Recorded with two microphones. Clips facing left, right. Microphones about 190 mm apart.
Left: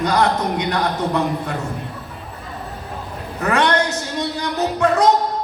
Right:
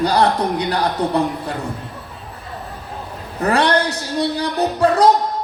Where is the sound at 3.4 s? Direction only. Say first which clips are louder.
Right 1 dB; 35° right (ahead or behind).